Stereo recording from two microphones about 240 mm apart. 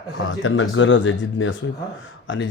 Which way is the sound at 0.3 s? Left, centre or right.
Left.